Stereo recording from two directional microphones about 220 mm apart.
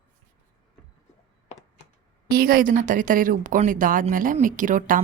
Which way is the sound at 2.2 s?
45° right (ahead or behind).